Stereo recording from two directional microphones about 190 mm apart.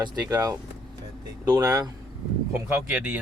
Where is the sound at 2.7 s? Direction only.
10° right (ahead or behind).